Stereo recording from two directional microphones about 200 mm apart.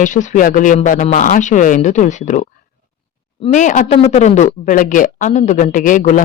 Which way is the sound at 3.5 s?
40° left (ahead or behind).